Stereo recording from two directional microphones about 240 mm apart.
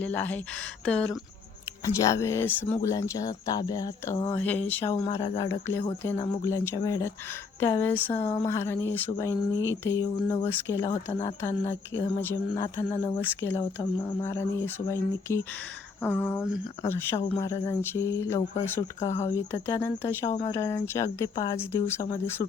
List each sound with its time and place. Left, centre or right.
0.0 s speech: centre
4.9 s speech: left
5.5 s speech: centre